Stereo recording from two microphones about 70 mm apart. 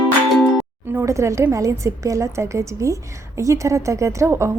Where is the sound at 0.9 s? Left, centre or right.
Right.